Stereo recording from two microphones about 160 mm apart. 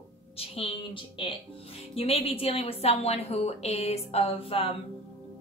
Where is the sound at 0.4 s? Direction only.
35° left (ahead or behind).